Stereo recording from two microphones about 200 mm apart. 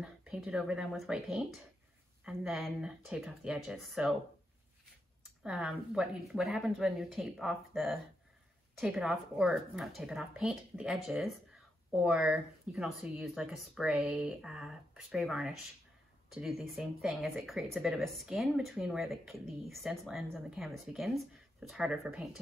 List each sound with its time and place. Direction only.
0.0 s speech: 5° right (ahead or behind)
5.4 s speech: 5° right (ahead or behind)